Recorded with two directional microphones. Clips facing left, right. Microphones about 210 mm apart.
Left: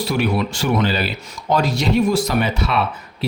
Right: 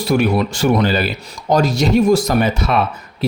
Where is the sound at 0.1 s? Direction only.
50° right (ahead or behind).